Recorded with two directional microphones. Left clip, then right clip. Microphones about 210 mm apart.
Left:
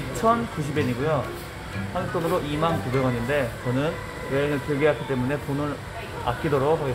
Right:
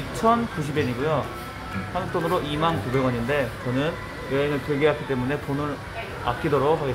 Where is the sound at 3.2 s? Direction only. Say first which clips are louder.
Even; 5° right (ahead or behind).